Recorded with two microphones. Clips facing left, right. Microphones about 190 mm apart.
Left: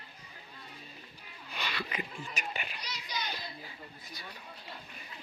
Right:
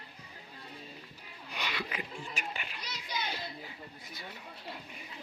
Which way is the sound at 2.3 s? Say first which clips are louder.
Left 1 dB; 15° left (ahead or behind).